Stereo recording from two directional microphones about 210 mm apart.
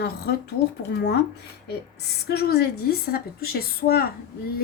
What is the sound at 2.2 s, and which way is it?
A woman's voice, 50° left (ahead or behind).